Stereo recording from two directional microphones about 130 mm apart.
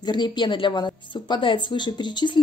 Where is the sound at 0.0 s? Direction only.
35° left (ahead or behind).